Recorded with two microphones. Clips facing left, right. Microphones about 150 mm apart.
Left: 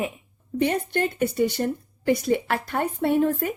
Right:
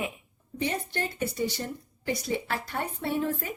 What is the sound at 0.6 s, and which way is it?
Speech, 55° left (ahead or behind).